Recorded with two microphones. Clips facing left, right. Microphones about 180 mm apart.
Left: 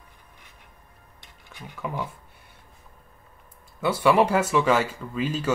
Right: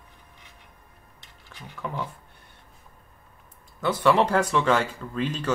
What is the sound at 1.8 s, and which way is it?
Speech, 5° left (ahead or behind).